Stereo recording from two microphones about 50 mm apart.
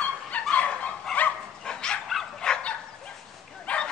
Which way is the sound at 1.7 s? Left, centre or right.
Centre.